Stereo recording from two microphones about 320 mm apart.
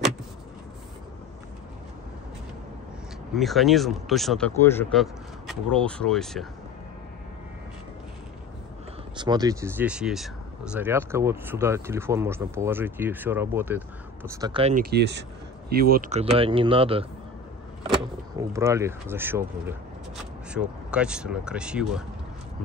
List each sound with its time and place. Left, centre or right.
3.3 s speech: centre
9.1 s speech: centre
14.4 s speech: centre
18.4 s speech: centre